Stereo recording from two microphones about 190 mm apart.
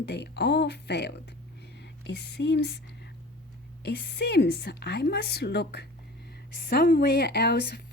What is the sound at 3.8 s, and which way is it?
A woman's voice, 60° left (ahead or behind).